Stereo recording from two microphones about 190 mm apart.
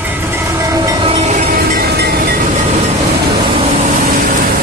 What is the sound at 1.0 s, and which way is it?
Train, 35° right (ahead or behind).